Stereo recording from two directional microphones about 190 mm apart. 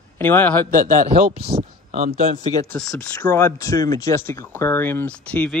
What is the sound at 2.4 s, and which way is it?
Speech, 20° left (ahead or behind).